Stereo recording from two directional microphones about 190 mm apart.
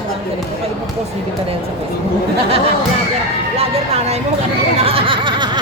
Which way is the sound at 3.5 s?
30° right (ahead or behind).